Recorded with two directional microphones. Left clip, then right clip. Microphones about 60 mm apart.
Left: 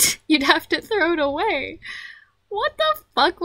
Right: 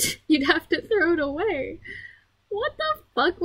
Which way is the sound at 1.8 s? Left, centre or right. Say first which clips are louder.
Left 5 dB; left.